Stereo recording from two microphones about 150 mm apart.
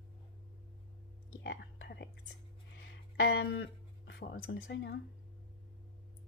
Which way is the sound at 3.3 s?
90° left.